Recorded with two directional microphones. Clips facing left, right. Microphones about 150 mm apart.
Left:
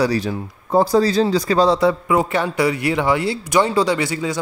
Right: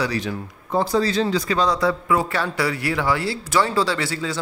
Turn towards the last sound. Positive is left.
turn(degrees=15)  # may be behind; listen again after turning